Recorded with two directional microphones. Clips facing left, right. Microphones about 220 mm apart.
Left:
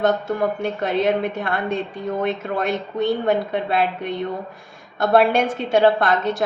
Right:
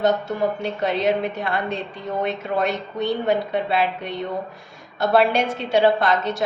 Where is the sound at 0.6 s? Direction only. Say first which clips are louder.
Left 1 dB; 50° left (ahead or behind).